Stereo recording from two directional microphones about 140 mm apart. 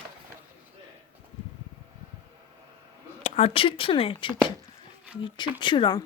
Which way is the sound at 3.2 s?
50° left (ahead or behind).